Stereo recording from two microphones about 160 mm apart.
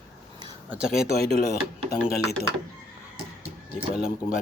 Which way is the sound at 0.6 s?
5° right (ahead or behind).